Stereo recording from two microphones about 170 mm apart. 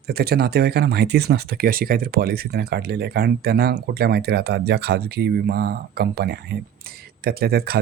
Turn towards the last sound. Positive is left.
turn(degrees=-65)  # may be behind; listen again after turning